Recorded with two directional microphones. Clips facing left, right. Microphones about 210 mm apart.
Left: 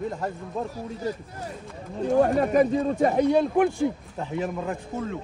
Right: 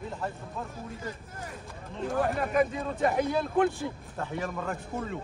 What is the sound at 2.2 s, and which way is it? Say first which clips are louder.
Speech: left 6 dB; 40° left (ahead or behind).